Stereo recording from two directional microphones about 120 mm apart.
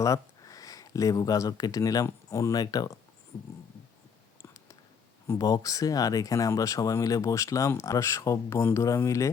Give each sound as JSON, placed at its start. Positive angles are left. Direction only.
{"t": 0.0, "sound": "speech", "side_deg": 30}
{"t": 4.4, "sound": "a sound", "side_deg": 25}
{"t": 5.3, "sound": "speech", "side_deg": 30}